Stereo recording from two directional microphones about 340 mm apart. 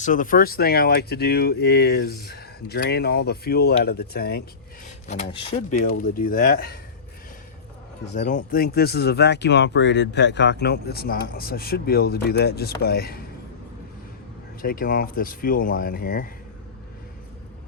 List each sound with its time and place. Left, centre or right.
0.0 s speech: left
8.1 s speech: left
14.6 s speech: left